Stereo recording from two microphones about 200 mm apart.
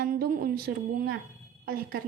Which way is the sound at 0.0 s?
45° right (ahead or behind).